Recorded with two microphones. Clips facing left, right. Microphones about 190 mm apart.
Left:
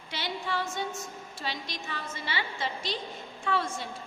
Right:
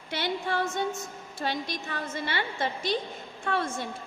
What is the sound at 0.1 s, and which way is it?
Female singing, 55° right (ahead or behind).